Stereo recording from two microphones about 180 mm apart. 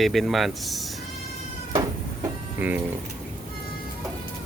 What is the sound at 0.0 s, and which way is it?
Speech, centre (ahead or behind).